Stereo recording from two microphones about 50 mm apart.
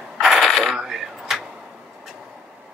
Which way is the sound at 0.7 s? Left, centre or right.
Centre.